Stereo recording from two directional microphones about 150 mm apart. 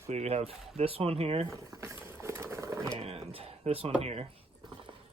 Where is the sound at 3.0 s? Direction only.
40° right (ahead or behind).